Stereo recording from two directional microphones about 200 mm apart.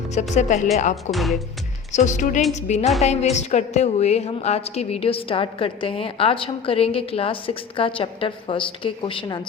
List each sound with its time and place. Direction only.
0.3 s speech: 40° left (ahead or behind)
1.1 s speech: centre (ahead or behind)
1.9 s a woman's voice: 35° left (ahead or behind)